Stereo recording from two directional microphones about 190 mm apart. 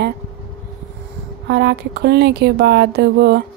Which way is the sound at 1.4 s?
65° right (ahead or behind).